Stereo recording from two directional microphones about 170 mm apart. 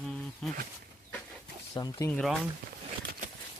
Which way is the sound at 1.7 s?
25° left (ahead or behind).